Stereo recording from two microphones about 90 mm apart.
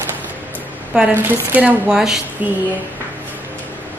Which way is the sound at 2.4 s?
15° right (ahead or behind).